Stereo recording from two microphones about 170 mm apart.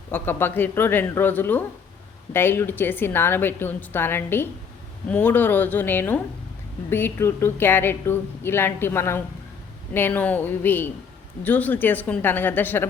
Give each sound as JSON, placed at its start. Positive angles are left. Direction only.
{"t": 0.1, "sound": "a woman's voice", "side_deg": 10}